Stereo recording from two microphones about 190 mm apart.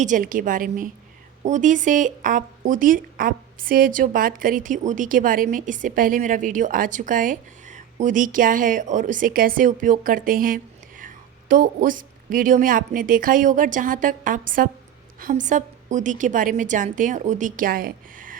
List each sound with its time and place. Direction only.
0.0 s a woman's voice: 45° right (ahead or behind)